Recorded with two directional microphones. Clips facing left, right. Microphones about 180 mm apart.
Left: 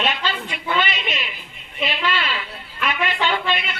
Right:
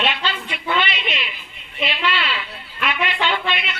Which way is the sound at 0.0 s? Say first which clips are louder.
Even; 45° left (ahead or behind).